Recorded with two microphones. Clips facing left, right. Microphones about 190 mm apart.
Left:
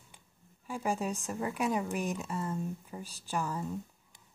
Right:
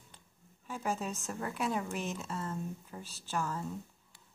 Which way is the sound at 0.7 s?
10° left (ahead or behind).